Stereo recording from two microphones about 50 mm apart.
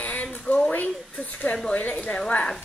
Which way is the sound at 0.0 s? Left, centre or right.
Left.